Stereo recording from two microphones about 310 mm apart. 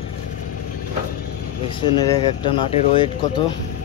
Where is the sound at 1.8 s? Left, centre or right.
Centre.